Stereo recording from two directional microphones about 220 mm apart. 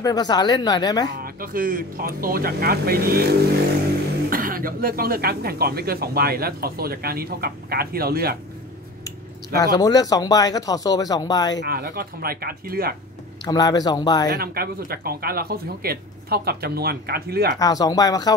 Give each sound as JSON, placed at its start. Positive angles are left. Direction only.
{"t": 0.0, "sound": "speech", "side_deg": 15}
{"t": 1.2, "sound": "speech", "side_deg": -40}
{"t": 9.6, "sound": "speech", "side_deg": 15}
{"t": 11.6, "sound": "speech", "side_deg": -45}
{"t": 13.4, "sound": "speech", "side_deg": 15}
{"t": 14.3, "sound": "speech", "side_deg": -45}
{"t": 17.6, "sound": "speech", "side_deg": 15}